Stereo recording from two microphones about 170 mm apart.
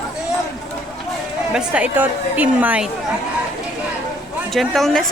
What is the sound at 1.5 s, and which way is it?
A woman's voice, 5° right (ahead or behind).